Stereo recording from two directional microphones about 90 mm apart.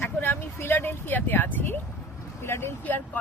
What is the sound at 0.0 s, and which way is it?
Speech, 25° left (ahead or behind).